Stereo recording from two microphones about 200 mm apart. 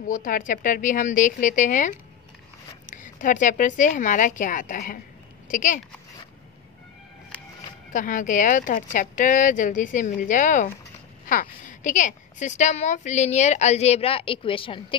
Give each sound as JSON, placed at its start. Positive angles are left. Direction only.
{"t": 0.1, "sound": "a woman's voice", "side_deg": 45}
{"t": 7.9, "sound": "a woman's voice", "side_deg": 40}